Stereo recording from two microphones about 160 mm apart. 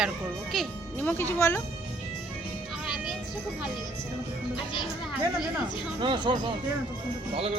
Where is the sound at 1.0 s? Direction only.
10° left (ahead or behind).